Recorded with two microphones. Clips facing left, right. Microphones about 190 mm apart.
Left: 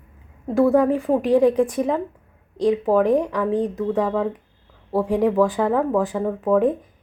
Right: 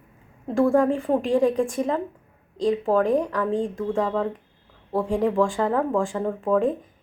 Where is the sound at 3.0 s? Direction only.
25° left (ahead or behind).